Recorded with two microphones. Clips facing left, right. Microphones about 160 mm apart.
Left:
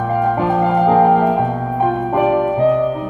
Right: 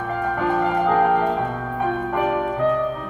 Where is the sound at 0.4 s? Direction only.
25° left (ahead or behind).